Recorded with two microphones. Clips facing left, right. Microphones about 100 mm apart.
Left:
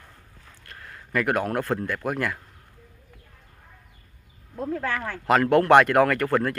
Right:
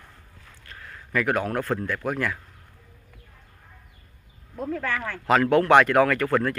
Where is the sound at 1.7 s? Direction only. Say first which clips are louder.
Even; 15° left (ahead or behind).